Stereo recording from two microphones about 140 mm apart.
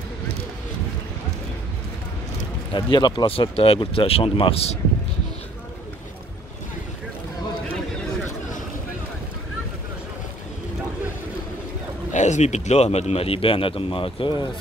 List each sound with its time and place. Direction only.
2.7 s speech: 30° left (ahead or behind)
12.1 s speech: 60° left (ahead or behind); by 14.4 s 35° left (ahead or behind)